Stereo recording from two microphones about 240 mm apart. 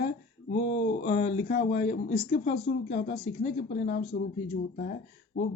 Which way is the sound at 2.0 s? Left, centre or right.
Left.